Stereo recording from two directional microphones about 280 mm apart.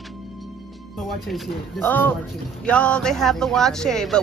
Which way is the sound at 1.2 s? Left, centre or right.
Centre.